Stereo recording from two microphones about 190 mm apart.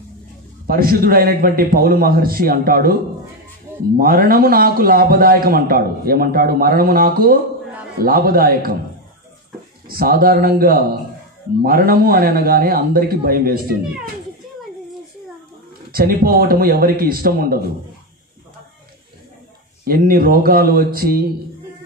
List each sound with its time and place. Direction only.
0.7 s a man's voice: 50° right (ahead or behind)
9.8 s a man's voice: 50° right (ahead or behind)
15.9 s a man's voice: 50° right (ahead or behind)
19.8 s a man's voice: 50° right (ahead or behind)